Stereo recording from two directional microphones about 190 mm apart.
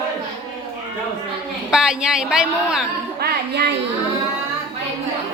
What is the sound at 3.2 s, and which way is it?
Speech, 60° right (ahead or behind).